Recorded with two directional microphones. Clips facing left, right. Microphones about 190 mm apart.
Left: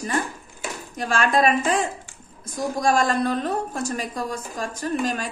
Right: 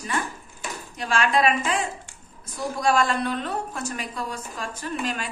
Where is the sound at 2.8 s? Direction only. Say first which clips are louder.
Left 1 dB; 45° left (ahead or behind).